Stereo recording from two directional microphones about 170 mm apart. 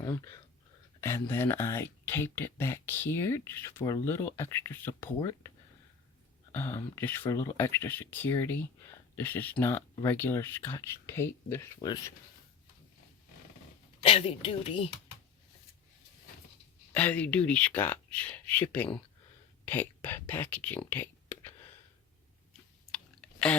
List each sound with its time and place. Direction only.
0.0 s speech: 20° left (ahead or behind)
6.5 s speech: 15° left (ahead or behind)
14.0 s speech: 35° left (ahead or behind)
16.9 s speech: 10° left (ahead or behind)
22.9 s a sound: 5° left (ahead or behind)